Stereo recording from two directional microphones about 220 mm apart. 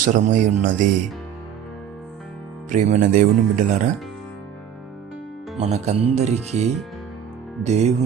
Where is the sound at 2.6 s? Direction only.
35° right (ahead or behind).